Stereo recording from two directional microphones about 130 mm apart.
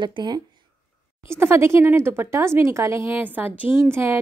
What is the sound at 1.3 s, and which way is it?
A woman's voice, 20° right (ahead or behind).